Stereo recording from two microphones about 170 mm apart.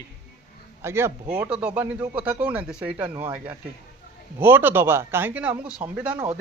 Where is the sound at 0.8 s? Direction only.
15° right (ahead or behind).